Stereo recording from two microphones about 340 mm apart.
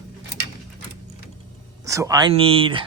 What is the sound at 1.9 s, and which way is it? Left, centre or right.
Speech, centre.